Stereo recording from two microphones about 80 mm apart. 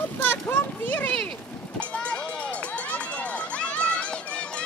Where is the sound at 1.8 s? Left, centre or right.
Centre.